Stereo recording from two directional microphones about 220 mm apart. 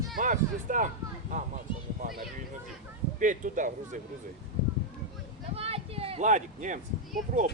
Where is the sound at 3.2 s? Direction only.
35° right (ahead or behind).